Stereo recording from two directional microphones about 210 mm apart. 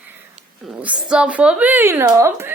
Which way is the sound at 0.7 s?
5° right (ahead or behind).